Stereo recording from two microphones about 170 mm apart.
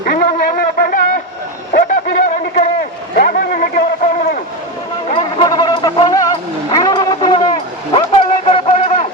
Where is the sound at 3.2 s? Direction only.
60° left (ahead or behind).